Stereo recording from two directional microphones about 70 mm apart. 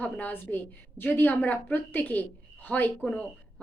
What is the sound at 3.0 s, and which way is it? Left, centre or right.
Speech, centre.